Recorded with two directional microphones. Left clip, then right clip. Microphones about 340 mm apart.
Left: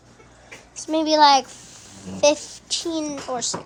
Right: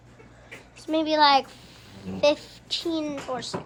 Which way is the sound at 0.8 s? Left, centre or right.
Centre.